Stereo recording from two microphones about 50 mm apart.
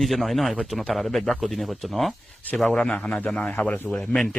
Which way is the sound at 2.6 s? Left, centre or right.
Centre.